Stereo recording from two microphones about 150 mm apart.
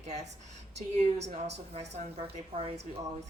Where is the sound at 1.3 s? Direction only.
45° right (ahead or behind).